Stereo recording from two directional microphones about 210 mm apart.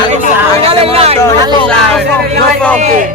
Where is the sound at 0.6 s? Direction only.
30° right (ahead or behind).